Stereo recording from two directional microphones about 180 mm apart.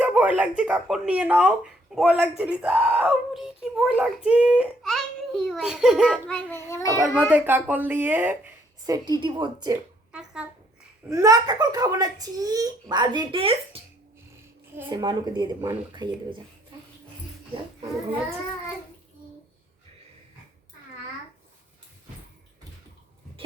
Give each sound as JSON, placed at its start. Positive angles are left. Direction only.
{"t": 0.0, "sound": "a child's voice", "side_deg": -5}
{"t": 6.7, "sound": "a child's voice", "side_deg": 15}
{"t": 7.0, "sound": "speech", "side_deg": -5}
{"t": 8.9, "sound": "a child's voice", "side_deg": -25}
{"t": 10.1, "sound": "a sound", "side_deg": -5}
{"t": 11.1, "sound": "a child's voice", "side_deg": -20}
{"t": 14.8, "sound": "a child's voice", "side_deg": -20}